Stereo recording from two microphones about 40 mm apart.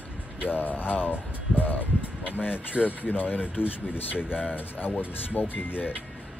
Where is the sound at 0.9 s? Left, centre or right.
Left.